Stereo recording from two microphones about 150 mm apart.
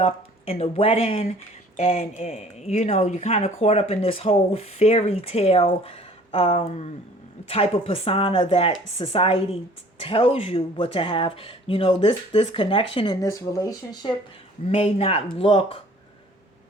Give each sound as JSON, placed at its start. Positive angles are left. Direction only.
{"t": 0.0, "sound": "speech", "side_deg": 40}
{"t": 13.2, "sound": "speech", "side_deg": 20}
{"t": 14.6, "sound": "speech", "side_deg": 40}